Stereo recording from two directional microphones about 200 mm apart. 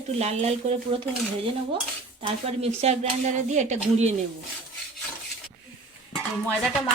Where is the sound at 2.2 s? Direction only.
30° right (ahead or behind).